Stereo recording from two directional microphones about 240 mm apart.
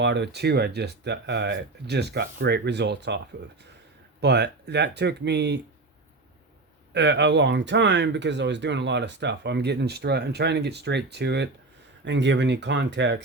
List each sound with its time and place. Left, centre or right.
0.0 s speech: right
4.2 s speech: right
6.9 s speech: right